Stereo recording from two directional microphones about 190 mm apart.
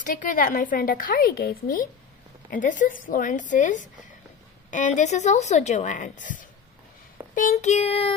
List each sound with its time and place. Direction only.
0.0 s a woman's voice: 45° left (ahead or behind)